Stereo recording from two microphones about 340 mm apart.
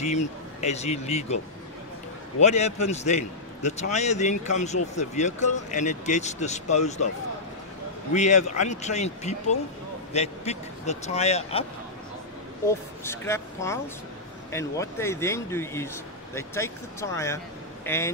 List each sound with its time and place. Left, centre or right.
0.0 s a man's voice: centre
2.4 s a man's voice: centre
8.1 s a man's voice: centre
12.6 s speech: centre